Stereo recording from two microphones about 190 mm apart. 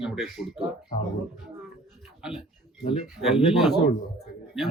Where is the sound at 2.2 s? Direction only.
5° right (ahead or behind).